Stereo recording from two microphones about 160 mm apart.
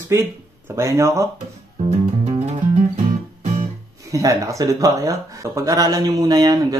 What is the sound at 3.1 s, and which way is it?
Music, 55° right (ahead or behind).